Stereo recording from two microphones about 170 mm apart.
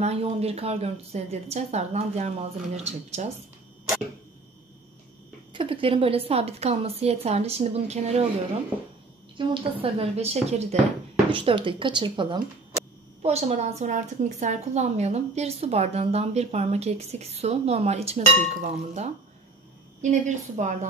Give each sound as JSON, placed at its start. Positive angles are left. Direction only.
{"t": 0.0, "sound": "a woman's voice", "side_deg": -40}
{"t": 5.5, "sound": "a woman's voice", "side_deg": -30}
{"t": 9.4, "sound": "a woman's voice", "side_deg": -30}
{"t": 13.2, "sound": "a woman's voice", "side_deg": -40}